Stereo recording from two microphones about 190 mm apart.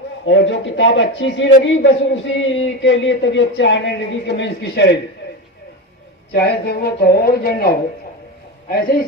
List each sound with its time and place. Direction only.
0.2 s speech: 75° left (ahead or behind)
6.3 s a man's voice: 55° left (ahead or behind)